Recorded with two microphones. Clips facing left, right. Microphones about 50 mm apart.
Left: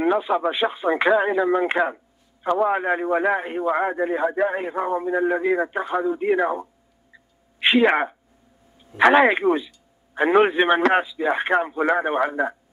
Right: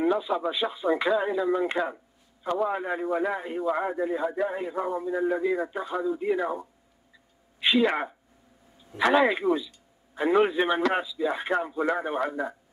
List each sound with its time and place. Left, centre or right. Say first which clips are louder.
0.0 s a man's voice: left 5 dB; left